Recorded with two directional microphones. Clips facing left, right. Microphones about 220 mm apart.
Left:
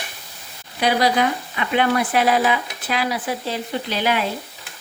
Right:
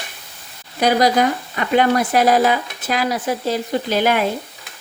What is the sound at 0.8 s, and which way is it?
Speech, 45° right (ahead or behind).